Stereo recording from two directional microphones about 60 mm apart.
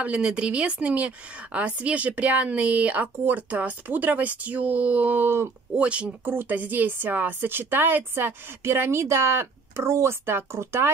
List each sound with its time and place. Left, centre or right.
0.0 s a woman's voice: centre
5.8 s a woman's voice: right
6.2 s a woman's voice: right